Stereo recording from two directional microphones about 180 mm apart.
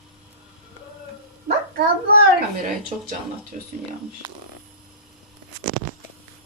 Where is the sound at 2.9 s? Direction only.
40° right (ahead or behind).